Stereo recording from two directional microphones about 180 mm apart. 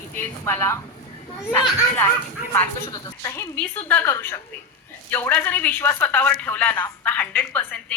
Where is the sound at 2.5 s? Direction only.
10° left (ahead or behind).